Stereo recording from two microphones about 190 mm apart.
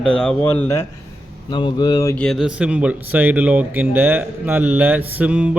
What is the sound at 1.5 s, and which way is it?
Speech, 25° left (ahead or behind).